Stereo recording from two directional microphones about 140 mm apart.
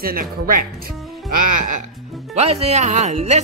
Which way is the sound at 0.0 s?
90° right.